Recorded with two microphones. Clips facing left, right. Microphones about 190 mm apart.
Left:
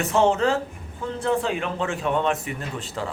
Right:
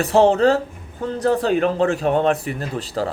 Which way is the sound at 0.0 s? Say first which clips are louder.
Right 6 dB; 35° right (ahead or behind).